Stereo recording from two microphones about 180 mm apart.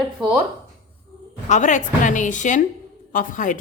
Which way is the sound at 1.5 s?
45° left (ahead or behind).